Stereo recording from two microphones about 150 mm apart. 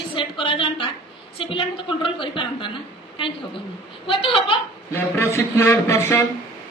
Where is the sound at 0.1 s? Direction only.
35° left (ahead or behind).